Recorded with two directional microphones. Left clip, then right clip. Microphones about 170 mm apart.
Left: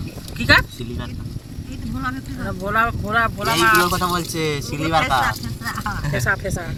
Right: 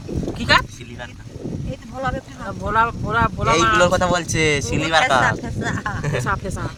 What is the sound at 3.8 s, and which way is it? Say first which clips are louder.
Speech: right 3 dB; 55° right (ahead or behind).